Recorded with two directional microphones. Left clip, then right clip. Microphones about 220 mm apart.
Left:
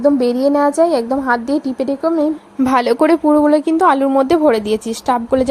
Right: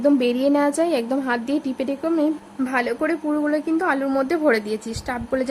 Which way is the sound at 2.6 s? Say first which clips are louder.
Left 9 dB; 30° left (ahead or behind).